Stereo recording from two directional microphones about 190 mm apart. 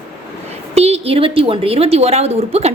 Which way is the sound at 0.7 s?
35° right (ahead or behind).